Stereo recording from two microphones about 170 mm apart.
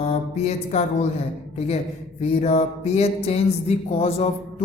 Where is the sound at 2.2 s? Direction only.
40° left (ahead or behind).